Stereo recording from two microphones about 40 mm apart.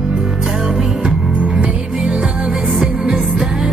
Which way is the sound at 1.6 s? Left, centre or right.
Right.